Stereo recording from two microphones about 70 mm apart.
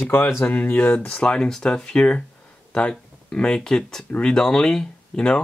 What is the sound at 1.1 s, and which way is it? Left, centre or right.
Speech, centre.